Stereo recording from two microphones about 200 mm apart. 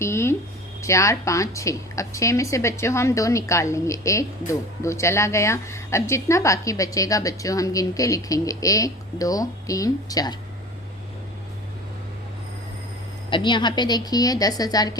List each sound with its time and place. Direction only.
0.0 s a woman's voice: 15° left (ahead or behind)
13.3 s a woman's voice: 25° left (ahead or behind)